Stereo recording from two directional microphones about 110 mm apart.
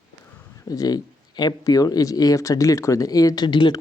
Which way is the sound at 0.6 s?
35° left (ahead or behind).